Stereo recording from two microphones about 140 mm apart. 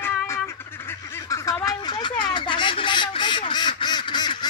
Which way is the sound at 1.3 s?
25° left (ahead or behind).